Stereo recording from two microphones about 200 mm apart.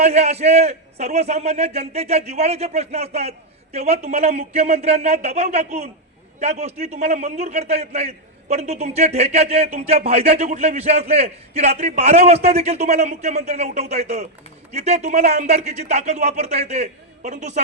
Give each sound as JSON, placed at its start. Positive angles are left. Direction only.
{"t": 0.0, "sound": "a man's voice", "side_deg": -35}